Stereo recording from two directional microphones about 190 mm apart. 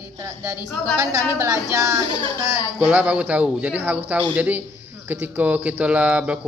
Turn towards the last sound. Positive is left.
turn(degrees=-5)  # may be behind; listen again after turning